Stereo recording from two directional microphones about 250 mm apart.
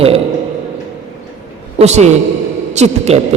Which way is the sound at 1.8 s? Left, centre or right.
Right.